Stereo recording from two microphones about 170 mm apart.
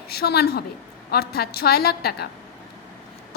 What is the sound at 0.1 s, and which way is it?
A woman's voice, 70° left (ahead or behind).